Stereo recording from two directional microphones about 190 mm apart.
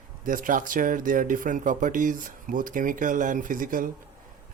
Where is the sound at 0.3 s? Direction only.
45° right (ahead or behind).